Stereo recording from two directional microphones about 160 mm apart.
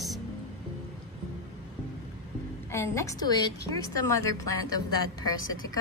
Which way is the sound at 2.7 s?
15° left (ahead or behind).